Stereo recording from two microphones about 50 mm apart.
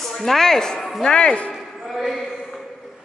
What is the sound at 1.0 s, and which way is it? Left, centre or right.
Speech, centre.